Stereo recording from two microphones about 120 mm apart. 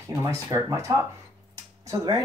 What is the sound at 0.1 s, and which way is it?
Speech, 25° right (ahead or behind).